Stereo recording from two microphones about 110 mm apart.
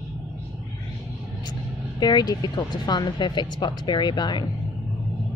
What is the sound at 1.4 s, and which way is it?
Speech, 40° left (ahead or behind).